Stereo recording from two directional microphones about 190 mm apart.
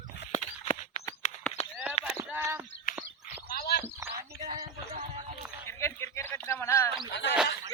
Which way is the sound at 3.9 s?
15° right (ahead or behind).